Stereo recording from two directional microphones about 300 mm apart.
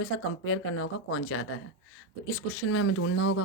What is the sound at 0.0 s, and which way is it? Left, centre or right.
Speech, left.